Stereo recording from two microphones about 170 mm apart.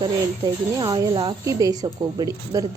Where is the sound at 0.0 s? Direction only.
25° right (ahead or behind).